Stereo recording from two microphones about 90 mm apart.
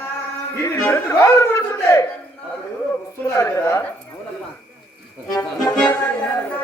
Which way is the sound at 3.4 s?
35° left (ahead or behind).